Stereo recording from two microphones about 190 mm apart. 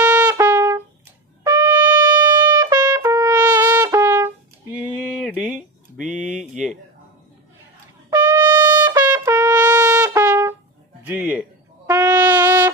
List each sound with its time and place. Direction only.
0.0 s trumpet: 5° right (ahead or behind)
3.8 s brass instrument: 15° right (ahead or behind)
4.7 s a sound: 5° right (ahead or behind)
8.1 s brass instrument: 20° right (ahead or behind)
9.6 s trumpet: 20° right (ahead or behind)
11.0 s a sound: 10° right (ahead or behind)
11.9 s music: 20° right (ahead or behind)